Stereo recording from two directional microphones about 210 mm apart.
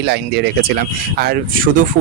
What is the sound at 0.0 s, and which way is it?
Speech, 50° right (ahead or behind).